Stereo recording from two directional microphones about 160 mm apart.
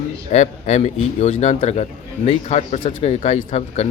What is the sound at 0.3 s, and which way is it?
A man's voice, 45° left (ahead or behind).